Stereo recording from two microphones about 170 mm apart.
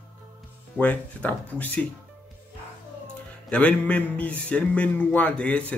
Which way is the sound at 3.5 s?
10° left (ahead or behind).